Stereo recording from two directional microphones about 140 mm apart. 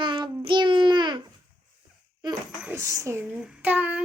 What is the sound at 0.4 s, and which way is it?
Babbling, 35° right (ahead or behind).